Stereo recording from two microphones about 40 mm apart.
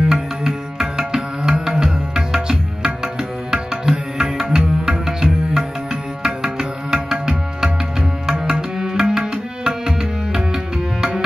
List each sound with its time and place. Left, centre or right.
0.1 s music: centre
3.5 s music: centre
8.3 s tabla: centre